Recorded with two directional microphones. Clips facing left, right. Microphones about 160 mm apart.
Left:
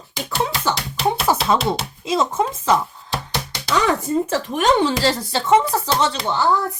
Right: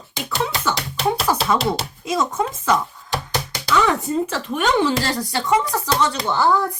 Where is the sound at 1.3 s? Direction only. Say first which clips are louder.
Left 3 dB; 15° left (ahead or behind).